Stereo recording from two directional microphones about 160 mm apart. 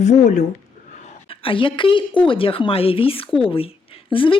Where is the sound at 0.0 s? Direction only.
45° left (ahead or behind).